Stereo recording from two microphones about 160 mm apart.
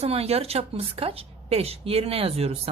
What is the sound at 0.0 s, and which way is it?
A woman's voice, 40° right (ahead or behind).